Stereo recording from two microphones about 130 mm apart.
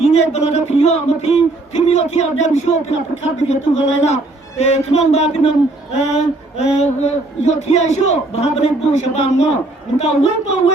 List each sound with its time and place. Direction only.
0.0 s a man's voice: 55° left (ahead or behind)